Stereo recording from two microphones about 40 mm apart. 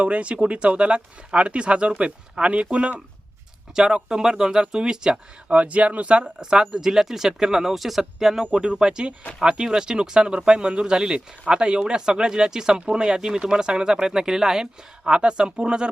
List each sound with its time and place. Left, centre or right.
0.0 s speech: right
3.8 s speech: centre
5.5 s speech: right
6.4 s speech: centre
8.5 s speech: right